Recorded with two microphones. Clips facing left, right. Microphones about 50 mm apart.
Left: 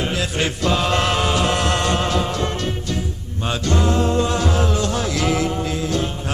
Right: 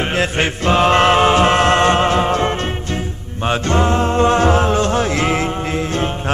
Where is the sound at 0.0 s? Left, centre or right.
Right.